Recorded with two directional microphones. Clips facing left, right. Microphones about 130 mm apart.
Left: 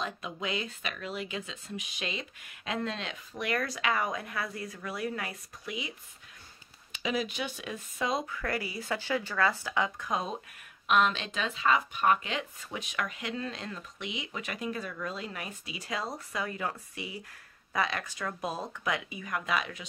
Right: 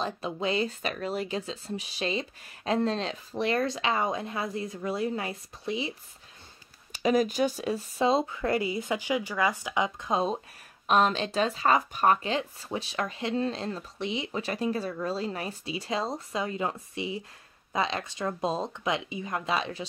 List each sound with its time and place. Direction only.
0.0 s speech: 30° right (ahead or behind)
6.9 s speech: 45° right (ahead or behind)